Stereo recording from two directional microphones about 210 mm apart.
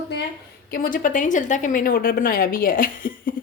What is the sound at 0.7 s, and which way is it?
Speech, 45° left (ahead or behind).